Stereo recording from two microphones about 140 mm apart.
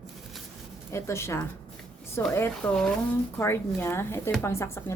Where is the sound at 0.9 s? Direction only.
20° left (ahead or behind).